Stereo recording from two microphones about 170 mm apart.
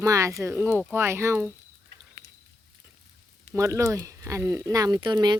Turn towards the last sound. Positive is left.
turn(degrees=-25)  # may be behind; listen again after turning